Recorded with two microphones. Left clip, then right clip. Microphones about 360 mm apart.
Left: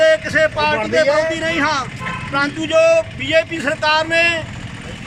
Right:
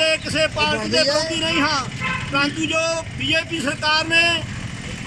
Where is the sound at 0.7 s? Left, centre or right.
Left.